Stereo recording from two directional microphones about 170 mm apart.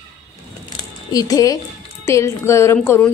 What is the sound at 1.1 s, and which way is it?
A woman's voice, 20° left (ahead or behind).